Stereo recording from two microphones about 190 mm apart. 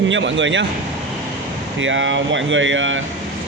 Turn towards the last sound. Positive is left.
turn(degrees=-90)